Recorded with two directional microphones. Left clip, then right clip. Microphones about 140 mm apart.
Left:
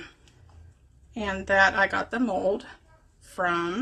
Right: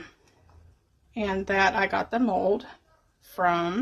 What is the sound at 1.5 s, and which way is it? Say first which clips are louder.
Speech: left 3 dB; 30° right (ahead or behind).